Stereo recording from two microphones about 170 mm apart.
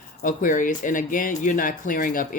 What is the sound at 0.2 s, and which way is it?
Speech, 50° left (ahead or behind).